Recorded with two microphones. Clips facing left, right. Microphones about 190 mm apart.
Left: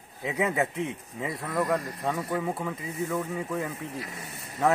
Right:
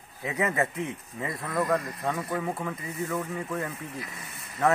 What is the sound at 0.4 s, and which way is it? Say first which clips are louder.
Speech: left 1 dB; 10° left (ahead or behind).